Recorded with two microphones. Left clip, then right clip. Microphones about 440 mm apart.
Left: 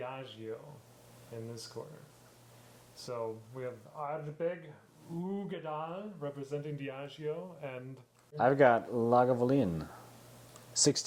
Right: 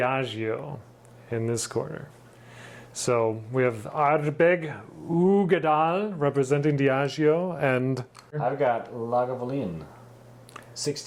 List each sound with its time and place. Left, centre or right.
0.0 s speech: right
1.7 s speech: right
3.1 s speech: right
8.4 s speech: left
10.8 s speech: left